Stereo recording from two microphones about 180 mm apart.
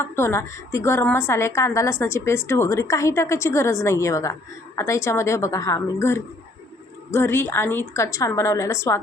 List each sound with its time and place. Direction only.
0.0 s a woman's voice: 15° left (ahead or behind)